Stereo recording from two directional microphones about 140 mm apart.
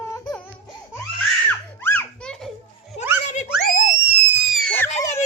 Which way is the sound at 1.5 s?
15° left (ahead or behind).